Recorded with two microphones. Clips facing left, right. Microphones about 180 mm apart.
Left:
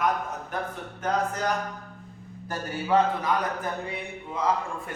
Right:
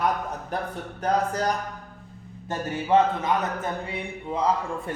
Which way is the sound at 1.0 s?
35° right (ahead or behind).